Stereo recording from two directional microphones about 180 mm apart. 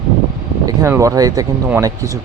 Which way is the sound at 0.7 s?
15° right (ahead or behind).